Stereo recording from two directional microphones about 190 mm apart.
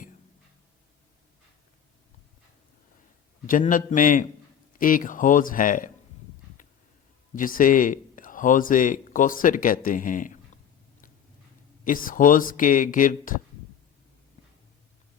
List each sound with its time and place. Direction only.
3.4 s speech: 45° left (ahead or behind)
7.3 s speech: 45° left (ahead or behind)
11.9 s speech: 45° left (ahead or behind)